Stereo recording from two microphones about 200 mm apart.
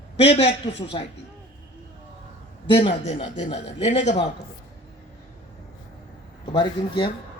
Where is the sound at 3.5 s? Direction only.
35° left (ahead or behind).